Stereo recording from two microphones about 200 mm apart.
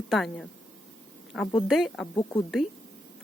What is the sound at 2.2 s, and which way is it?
Speech, 20° left (ahead or behind).